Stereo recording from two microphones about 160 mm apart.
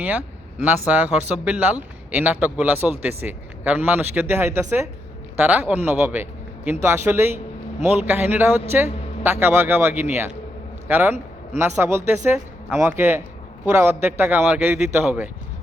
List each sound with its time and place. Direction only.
0.0 s speech: 10° right (ahead or behind)